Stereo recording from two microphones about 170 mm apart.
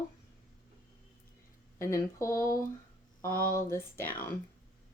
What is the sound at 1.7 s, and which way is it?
Speech, 15° left (ahead or behind).